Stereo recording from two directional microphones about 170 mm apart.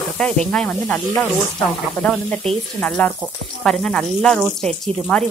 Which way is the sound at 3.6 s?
5° left (ahead or behind).